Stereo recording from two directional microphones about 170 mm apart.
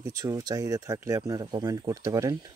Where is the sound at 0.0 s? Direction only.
20° right (ahead or behind).